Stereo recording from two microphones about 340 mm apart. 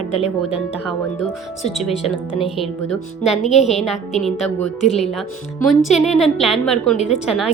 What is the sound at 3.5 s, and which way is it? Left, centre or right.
Speech, centre.